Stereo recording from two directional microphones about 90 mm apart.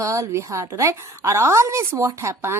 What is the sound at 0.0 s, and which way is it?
A woman's voice, 35° right (ahead or behind).